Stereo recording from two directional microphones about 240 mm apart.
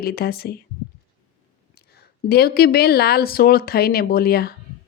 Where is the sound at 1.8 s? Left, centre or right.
Left.